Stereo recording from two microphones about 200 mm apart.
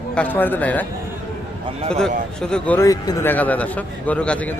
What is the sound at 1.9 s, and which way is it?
A man's voice, 5° left (ahead or behind).